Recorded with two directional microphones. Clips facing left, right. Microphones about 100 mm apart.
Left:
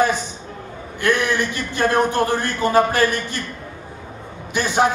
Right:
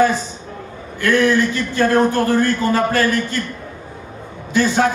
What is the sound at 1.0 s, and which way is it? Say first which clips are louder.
A man's voice: right 4 dB; 20° left (ahead or behind).